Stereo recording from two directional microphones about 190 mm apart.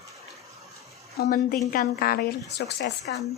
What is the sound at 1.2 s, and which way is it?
A woman's voice, 50° left (ahead or behind).